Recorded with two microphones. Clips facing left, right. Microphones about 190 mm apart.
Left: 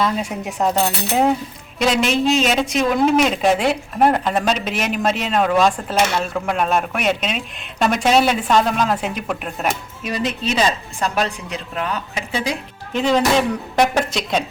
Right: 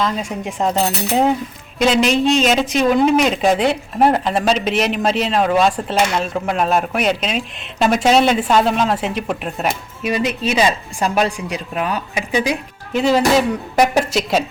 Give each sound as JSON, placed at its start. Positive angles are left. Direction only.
{"t": 0.0, "sound": "speech", "side_deg": 5}
{"t": 6.1, "sound": "speech", "side_deg": -30}
{"t": 6.5, "sound": "speech", "side_deg": 0}